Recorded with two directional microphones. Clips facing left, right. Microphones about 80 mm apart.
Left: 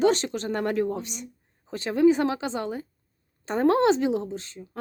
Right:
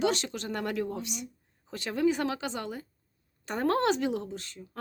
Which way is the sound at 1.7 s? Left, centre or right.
Left.